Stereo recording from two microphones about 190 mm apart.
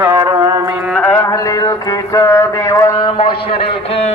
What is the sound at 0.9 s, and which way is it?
Music, 5° left (ahead or behind).